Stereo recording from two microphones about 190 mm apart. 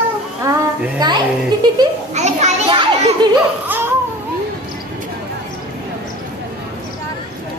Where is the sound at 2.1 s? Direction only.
35° right (ahead or behind).